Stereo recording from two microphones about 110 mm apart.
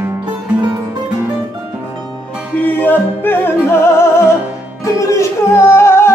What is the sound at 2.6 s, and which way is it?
Music, 15° left (ahead or behind).